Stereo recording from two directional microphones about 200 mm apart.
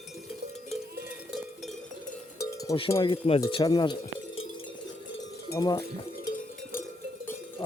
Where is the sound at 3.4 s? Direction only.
20° left (ahead or behind).